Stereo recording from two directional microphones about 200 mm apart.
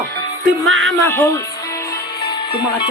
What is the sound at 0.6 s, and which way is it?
Music, 75° right (ahead or behind).